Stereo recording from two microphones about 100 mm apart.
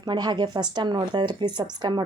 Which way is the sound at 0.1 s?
50° right (ahead or behind).